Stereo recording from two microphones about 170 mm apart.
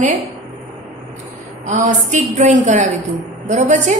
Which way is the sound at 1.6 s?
45° right (ahead or behind).